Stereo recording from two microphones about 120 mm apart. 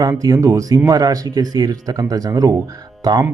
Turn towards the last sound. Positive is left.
turn(degrees=-30)  # may be behind; listen again after turning